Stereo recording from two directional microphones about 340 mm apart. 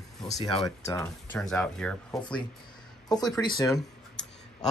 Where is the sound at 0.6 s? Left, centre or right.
Centre.